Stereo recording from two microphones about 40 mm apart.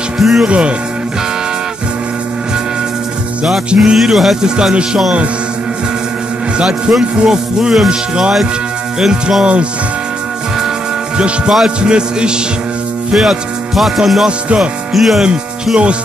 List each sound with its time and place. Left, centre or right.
0.2 s music: centre
0.5 s music: right
3.9 s speech: centre
4.4 s music: centre
6.6 s music: centre
11.1 s music: right
13.1 s music: centre
14.2 s music: right
14.9 s speech: centre
15.2 s speech: right